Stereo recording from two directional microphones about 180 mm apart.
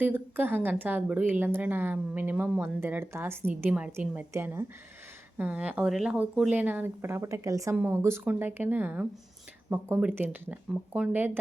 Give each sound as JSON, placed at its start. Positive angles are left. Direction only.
{"t": 0.0, "sound": "speech", "side_deg": -10}